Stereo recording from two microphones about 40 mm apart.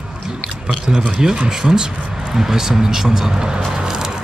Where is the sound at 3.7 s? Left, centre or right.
Centre.